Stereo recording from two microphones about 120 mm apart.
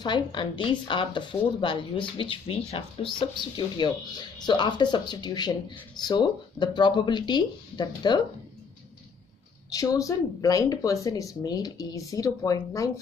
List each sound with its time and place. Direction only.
0.0 s speech: 40° left (ahead or behind)
3.2 s speech: 40° left (ahead or behind)
9.7 s speech: 30° left (ahead or behind)